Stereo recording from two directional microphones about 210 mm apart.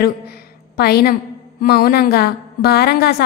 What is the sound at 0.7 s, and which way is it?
A woman's voice, 50° left (ahead or behind).